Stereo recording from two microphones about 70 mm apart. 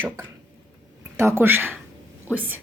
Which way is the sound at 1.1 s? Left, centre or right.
Right.